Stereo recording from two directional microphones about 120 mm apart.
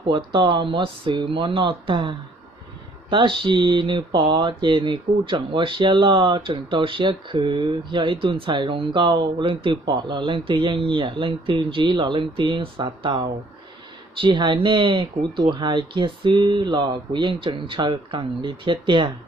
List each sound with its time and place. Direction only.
0.0 s speech: 45° right (ahead or behind)